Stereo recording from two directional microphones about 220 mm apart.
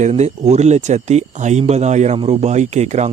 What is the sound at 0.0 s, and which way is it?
Speech, 30° right (ahead or behind).